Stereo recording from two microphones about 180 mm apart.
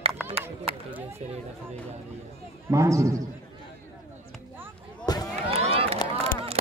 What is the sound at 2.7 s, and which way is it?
Speech, 15° right (ahead or behind).